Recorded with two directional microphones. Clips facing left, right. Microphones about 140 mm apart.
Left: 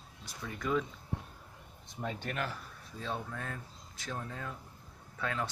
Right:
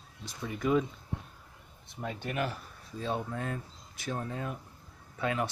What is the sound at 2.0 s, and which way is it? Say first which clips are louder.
Speech: right 3 dB; 5° right (ahead or behind).